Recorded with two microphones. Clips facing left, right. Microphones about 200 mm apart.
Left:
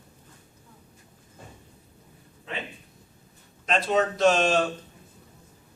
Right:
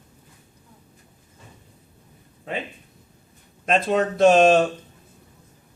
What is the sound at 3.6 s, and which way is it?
Speech, 50° right (ahead or behind).